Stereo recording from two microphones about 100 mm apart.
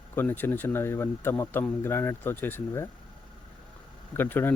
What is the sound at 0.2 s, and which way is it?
Speech, 20° left (ahead or behind).